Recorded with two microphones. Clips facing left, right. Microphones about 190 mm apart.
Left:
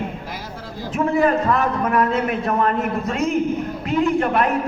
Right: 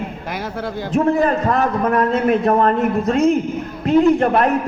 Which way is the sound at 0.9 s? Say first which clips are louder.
Right 2 dB; 40° right (ahead or behind).